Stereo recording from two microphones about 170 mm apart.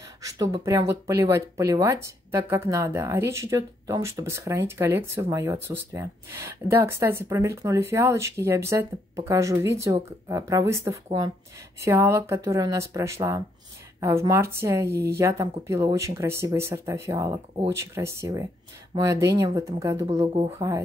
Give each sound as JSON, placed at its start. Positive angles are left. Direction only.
{"t": 0.2, "sound": "speech", "side_deg": -20}